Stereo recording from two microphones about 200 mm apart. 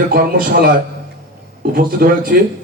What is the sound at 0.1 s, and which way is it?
Speech, 45° right (ahead or behind).